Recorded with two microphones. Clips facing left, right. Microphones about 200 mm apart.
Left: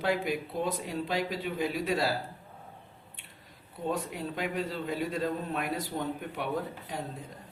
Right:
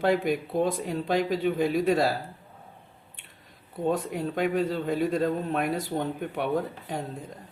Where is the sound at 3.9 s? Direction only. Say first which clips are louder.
Right 6 dB; 50° right (ahead or behind).